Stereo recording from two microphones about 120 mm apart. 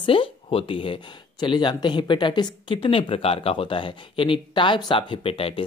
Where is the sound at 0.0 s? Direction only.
45° left (ahead or behind).